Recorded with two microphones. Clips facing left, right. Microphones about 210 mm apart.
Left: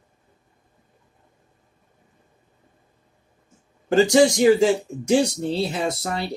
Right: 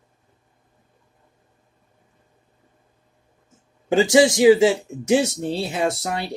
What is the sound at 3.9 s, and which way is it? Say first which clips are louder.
Speech: even; 10° right (ahead or behind).